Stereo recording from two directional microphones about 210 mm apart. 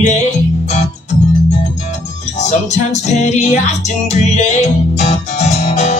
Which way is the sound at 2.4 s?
35° left (ahead or behind).